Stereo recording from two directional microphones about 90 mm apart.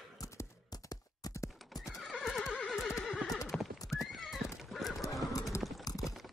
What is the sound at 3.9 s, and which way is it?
Clip-clop, 30° left (ahead or behind).